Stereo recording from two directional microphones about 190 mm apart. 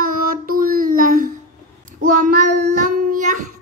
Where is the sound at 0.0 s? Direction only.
50° right (ahead or behind).